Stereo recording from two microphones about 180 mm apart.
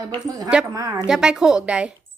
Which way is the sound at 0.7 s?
20° right (ahead or behind).